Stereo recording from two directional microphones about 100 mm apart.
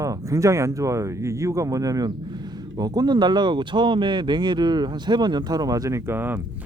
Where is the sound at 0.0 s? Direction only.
35° right (ahead or behind).